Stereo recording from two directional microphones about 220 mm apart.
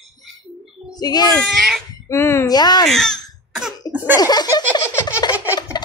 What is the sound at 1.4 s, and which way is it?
Speech, centre (ahead or behind).